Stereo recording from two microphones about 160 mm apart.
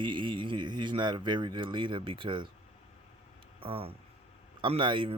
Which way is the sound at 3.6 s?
35° right (ahead or behind).